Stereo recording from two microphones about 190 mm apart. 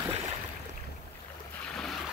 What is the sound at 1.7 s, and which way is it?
Boat, 5° left (ahead or behind).